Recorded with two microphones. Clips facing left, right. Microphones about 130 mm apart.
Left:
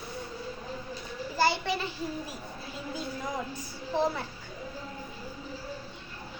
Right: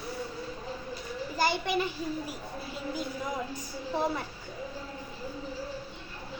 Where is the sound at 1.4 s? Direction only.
15° right (ahead or behind).